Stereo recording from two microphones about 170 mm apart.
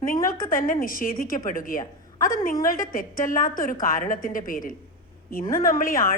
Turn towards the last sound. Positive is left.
turn(degrees=55)  # may be behind; listen again after turning